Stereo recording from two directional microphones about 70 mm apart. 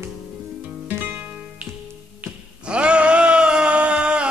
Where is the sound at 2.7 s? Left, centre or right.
Centre.